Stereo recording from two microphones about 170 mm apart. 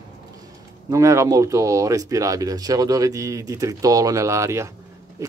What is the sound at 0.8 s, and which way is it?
Speech, 20° right (ahead or behind).